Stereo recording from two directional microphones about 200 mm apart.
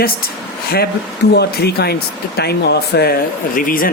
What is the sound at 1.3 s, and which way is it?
Speech, 55° left (ahead or behind).